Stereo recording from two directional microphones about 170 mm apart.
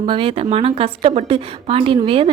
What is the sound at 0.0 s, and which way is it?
A woman's voice, 30° right (ahead or behind).